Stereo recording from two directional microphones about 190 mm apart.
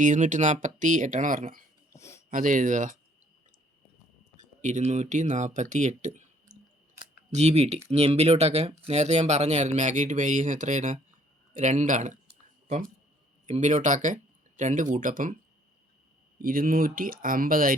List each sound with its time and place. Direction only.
0.0 s speech: 40° right (ahead or behind)
1.9 s a sound: 15° left (ahead or behind)
2.3 s speech: 45° right (ahead or behind)
4.4 s a sound: 40° right (ahead or behind)
7.3 s speech: 35° right (ahead or behind)
16.4 s speech: 50° right (ahead or behind)